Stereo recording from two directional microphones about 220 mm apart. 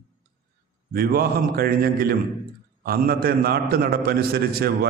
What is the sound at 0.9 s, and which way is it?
A man's voice, 45° right (ahead or behind).